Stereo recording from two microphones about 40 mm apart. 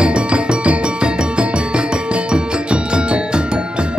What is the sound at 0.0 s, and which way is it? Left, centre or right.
Music, right.